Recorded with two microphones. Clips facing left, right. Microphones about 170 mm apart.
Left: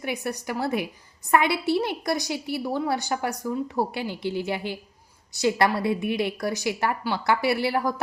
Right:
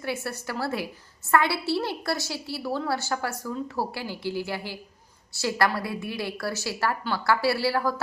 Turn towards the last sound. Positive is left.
turn(degrees=20)  # may be behind; listen again after turning